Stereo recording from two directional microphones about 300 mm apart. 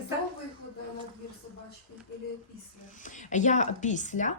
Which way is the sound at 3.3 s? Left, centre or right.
Left.